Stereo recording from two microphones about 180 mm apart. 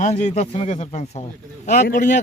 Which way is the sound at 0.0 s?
40° left (ahead or behind).